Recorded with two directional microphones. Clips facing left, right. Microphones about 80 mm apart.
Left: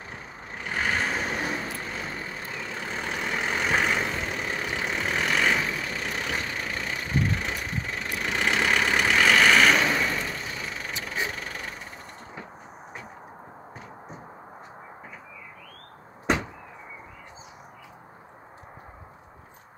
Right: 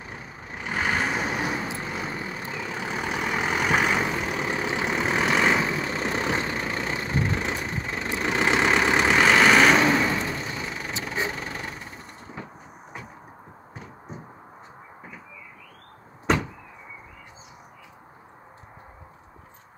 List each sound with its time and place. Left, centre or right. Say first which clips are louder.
0.6 s vehicle: right 2 dB; centre